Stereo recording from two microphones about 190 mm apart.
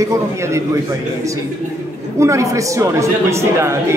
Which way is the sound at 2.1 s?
15° right (ahead or behind).